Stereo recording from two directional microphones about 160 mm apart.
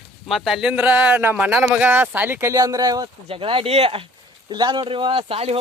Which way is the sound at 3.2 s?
35° right (ahead or behind).